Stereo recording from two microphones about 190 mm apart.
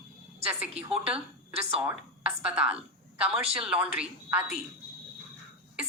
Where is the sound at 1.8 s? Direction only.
5° right (ahead or behind).